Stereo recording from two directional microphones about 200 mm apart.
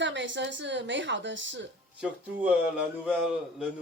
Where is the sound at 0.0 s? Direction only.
65° right (ahead or behind).